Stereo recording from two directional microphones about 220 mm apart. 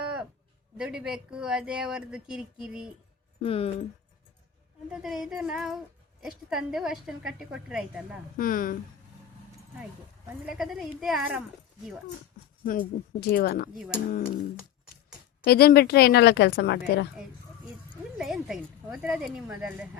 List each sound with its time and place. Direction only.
0.8 s speech: 5° right (ahead or behind)
3.4 s speech: 25° left (ahead or behind)
4.9 s speech: centre (ahead or behind)
8.4 s speech: 40° left (ahead or behind)
10.4 s speech: centre (ahead or behind)
13.1 s a woman's voice: 45° left (ahead or behind)
13.7 s speech: 5° right (ahead or behind)
14.1 s a woman's voice: 40° left (ahead or behind)
15.4 s a woman's voice: 45° left (ahead or behind)
18.2 s speech: centre (ahead or behind)